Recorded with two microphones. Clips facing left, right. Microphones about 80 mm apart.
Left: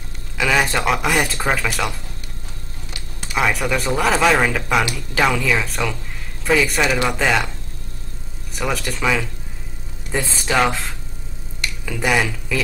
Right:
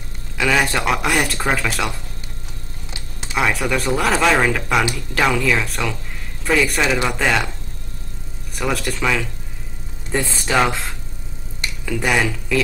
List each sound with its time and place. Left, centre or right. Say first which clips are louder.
0.4 s speech: even; centre
2.9 s a sound: right 1 dB; right
3.3 s speech: even; centre
8.5 s speech: right 1 dB; centre